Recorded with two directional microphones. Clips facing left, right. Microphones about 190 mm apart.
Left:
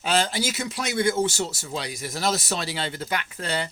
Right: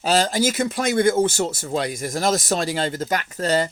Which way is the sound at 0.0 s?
40° right (ahead or behind).